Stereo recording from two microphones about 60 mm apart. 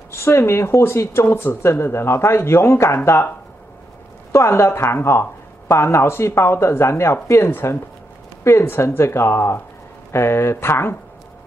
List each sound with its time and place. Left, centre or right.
0.1 s speech: left
4.3 s speech: left